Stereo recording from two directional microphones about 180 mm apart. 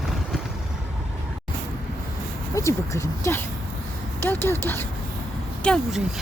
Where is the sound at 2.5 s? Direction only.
15° left (ahead or behind).